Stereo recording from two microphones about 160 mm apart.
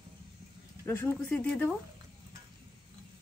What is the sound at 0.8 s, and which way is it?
Speech, 15° left (ahead or behind).